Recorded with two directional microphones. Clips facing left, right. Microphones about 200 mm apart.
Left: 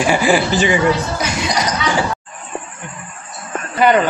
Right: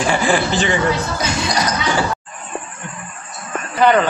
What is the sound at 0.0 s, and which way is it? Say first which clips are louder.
Speech: left 2 dB; 10° left (ahead or behind).